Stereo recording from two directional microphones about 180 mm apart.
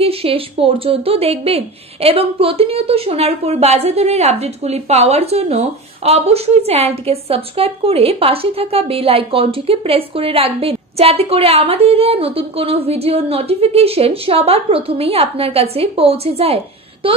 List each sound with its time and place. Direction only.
0.0 s a woman's voice: 30° right (ahead or behind)